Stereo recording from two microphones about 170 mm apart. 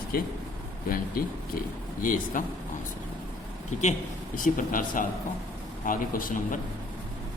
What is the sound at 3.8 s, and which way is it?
A man's voice, 50° left (ahead or behind).